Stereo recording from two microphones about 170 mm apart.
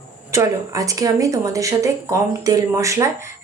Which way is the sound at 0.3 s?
15° right (ahead or behind).